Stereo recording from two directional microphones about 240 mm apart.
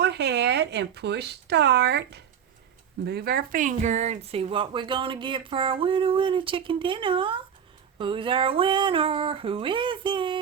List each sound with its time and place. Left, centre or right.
0.0 s speech: right; by 10.4 s centre